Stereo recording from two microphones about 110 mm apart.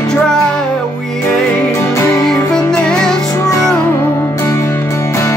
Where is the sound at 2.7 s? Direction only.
10° left (ahead or behind).